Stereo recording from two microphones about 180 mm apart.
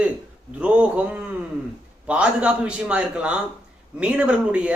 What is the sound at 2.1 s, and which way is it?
Speech, 5° right (ahead or behind).